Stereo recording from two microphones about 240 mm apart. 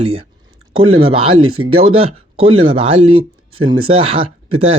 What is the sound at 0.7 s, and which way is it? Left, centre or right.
Speech, right.